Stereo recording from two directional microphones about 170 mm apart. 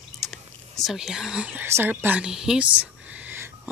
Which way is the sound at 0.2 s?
Centre (ahead or behind).